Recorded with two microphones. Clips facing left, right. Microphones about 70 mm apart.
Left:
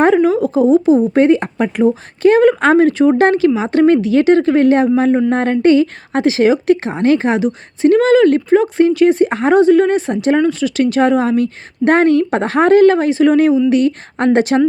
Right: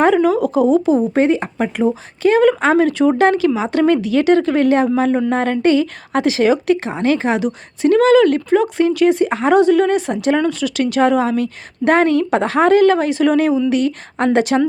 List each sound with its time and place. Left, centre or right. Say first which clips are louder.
0.2 s a woman's voice: left 2 dB; left
1.1 s a woman's voice: left 4 dB; left